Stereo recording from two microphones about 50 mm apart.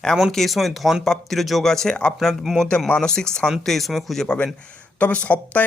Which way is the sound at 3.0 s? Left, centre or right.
Centre.